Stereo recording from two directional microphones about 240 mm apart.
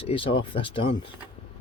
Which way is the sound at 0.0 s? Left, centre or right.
Left.